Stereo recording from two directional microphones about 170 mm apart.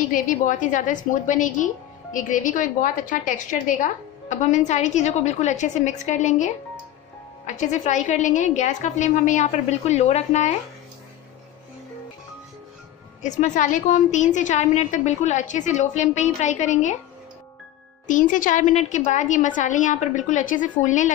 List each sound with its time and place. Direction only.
0.0 s a woman's voice: 50° left (ahead or behind)
13.2 s a woman's voice: 45° left (ahead or behind)
18.0 s a woman's voice: 50° left (ahead or behind)